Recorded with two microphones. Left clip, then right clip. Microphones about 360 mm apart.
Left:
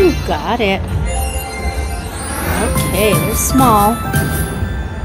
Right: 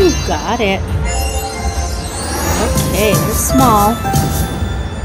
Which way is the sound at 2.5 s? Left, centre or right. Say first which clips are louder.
Even; centre.